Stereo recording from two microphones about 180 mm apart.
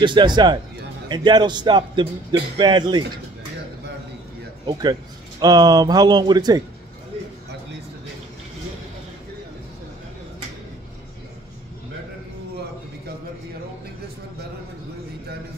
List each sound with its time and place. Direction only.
0.0 s a man's voice: 25° right (ahead or behind)
4.6 s a man's voice: 25° right (ahead or behind)